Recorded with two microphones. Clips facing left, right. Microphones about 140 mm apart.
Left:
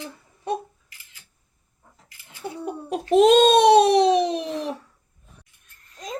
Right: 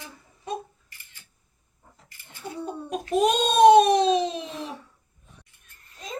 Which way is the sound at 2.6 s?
80° left.